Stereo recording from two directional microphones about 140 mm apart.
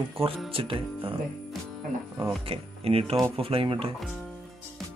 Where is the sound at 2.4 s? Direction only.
45° right (ahead or behind).